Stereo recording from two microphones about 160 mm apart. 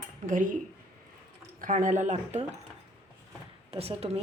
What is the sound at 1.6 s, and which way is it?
Speech, 55° right (ahead or behind).